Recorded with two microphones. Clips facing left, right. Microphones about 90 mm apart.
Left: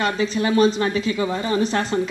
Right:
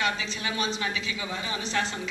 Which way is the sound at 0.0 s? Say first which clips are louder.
Left 9 dB; 40° left (ahead or behind).